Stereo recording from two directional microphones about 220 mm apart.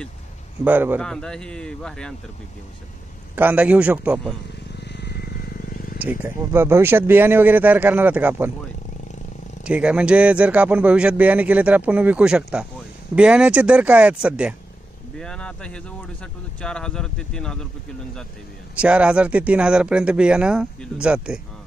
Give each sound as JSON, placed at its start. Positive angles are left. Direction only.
{"t": 0.7, "sound": "speech", "side_deg": -10}
{"t": 1.0, "sound": "speech", "side_deg": 5}
{"t": 3.3, "sound": "speech", "side_deg": -5}
{"t": 4.7, "sound": "a sound", "side_deg": 50}
{"t": 5.9, "sound": "speech", "side_deg": -10}
{"t": 9.7, "sound": "speech", "side_deg": -5}
{"t": 18.8, "sound": "speech", "side_deg": -5}